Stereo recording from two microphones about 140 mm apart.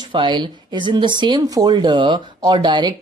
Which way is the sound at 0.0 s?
35° right (ahead or behind).